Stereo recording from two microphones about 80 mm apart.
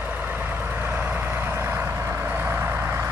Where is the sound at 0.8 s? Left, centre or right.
Right.